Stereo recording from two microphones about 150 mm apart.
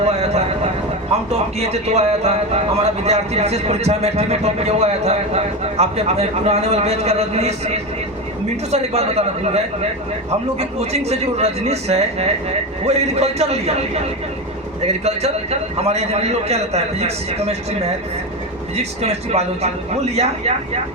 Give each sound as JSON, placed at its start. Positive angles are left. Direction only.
{"t": 0.0, "sound": "a sound", "side_deg": -45}
{"t": 1.5, "sound": "speech", "side_deg": -45}
{"t": 15.0, "sound": "speech", "side_deg": -45}
{"t": 18.8, "sound": "speech", "side_deg": -45}